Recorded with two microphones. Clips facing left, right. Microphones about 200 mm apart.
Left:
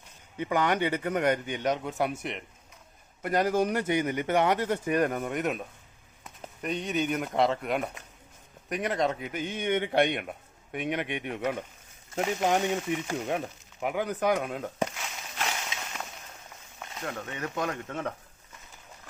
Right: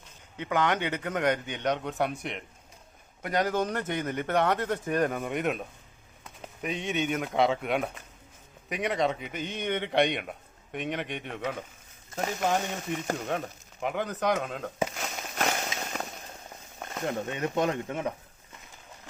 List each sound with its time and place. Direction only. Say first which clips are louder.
0.3 s speech: left 1 dB; 10° left (ahead or behind)
3.2 s speech: left 2 dB; 5° left (ahead or behind)
9.3 s speech: left 2 dB; 50° left (ahead or behind)
9.6 s speech: left 1 dB; 10° left (ahead or behind)
12.6 s speech: left 3 dB; 45° right (ahead or behind)
13.8 s speech: left 1 dB; 10° left (ahead or behind)
14.9 s fireworks: right 4 dB; 45° right (ahead or behind)
17.0 s speech: right 5 dB; 25° right (ahead or behind)